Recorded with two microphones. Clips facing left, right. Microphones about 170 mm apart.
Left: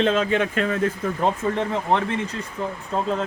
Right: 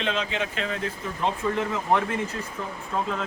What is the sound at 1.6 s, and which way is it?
Speech, 30° left (ahead or behind).